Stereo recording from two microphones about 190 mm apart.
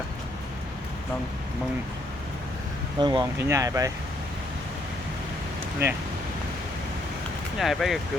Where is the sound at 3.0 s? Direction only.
20° right (ahead or behind).